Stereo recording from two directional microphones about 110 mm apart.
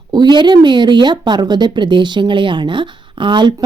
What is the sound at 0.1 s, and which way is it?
Speech, 40° right (ahead or behind).